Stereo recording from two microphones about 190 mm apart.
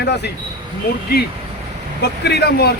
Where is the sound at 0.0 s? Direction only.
60° left (ahead or behind).